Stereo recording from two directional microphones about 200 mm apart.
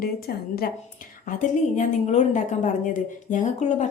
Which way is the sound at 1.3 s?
40° left (ahead or behind).